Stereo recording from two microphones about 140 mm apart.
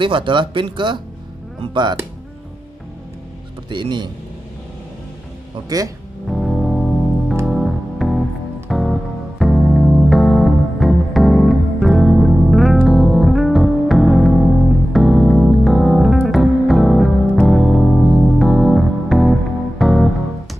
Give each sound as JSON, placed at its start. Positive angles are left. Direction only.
{"t": 0.0, "sound": "speech", "side_deg": -35}
{"t": 3.7, "sound": "speech", "side_deg": -35}
{"t": 5.7, "sound": "speech", "side_deg": -25}
{"t": 6.2, "sound": "music", "side_deg": 0}